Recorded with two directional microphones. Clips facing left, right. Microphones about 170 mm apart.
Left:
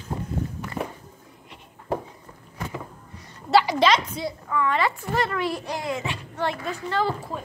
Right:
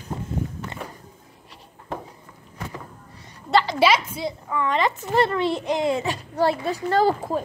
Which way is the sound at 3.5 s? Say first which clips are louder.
Left 1 dB; 10° left (ahead or behind).